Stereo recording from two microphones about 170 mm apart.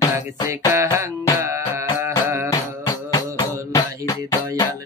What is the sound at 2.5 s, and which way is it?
Music, 20° left (ahead or behind).